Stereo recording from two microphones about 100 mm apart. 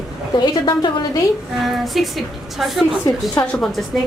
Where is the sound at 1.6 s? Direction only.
Centre (ahead or behind).